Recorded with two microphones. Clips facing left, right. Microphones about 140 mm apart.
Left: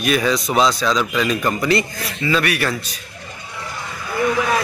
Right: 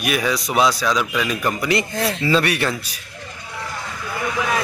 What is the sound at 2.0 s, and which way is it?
Speech, 30° right (ahead or behind).